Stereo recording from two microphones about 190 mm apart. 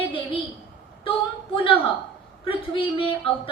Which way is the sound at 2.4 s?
30° left (ahead or behind).